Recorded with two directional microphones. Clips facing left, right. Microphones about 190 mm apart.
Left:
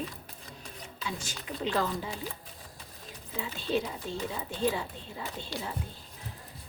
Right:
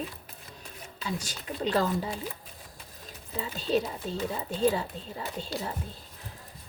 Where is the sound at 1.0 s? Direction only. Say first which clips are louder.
Right 3 dB; 40° right (ahead or behind).